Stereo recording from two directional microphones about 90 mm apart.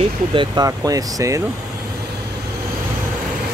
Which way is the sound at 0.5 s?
40° right (ahead or behind).